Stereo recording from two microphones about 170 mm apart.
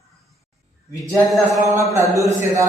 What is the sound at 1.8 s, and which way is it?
Speech, 15° right (ahead or behind).